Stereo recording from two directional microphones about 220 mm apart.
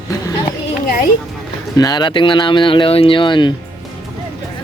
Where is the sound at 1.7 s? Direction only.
20° left (ahead or behind).